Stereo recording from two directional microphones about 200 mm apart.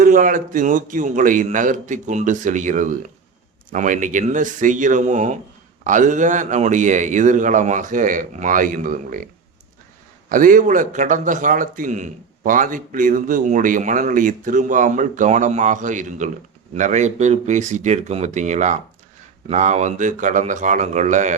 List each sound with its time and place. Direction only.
0.0 s a man's voice: 45° right (ahead or behind)